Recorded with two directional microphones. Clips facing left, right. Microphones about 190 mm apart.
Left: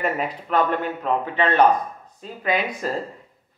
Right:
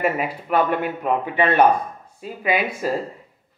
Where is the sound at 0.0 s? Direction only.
10° right (ahead or behind).